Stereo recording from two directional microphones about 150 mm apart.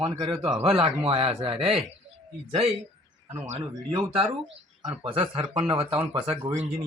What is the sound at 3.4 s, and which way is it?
A man's voice, 45° right (ahead or behind).